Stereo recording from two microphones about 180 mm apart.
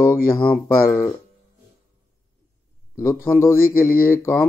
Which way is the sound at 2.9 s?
15° left (ahead or behind).